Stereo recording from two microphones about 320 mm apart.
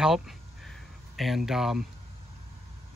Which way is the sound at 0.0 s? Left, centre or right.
Centre.